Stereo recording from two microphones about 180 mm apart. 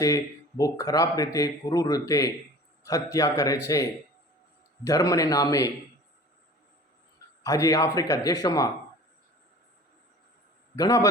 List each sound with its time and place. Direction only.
0.0 s a man's voice: 20° left (ahead or behind)
4.8 s a man's voice: 20° left (ahead or behind)
7.4 s a man's voice: 20° left (ahead or behind)
10.8 s a man's voice: 20° left (ahead or behind)